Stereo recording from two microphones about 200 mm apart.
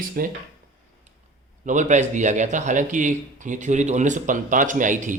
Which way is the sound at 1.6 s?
35° right (ahead or behind).